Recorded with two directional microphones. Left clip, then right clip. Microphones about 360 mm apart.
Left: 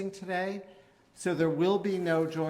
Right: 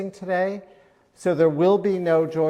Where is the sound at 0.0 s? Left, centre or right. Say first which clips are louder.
Right 9 dB; right.